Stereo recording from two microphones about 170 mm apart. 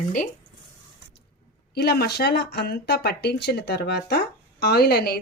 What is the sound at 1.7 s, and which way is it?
Speech, 70° left (ahead or behind).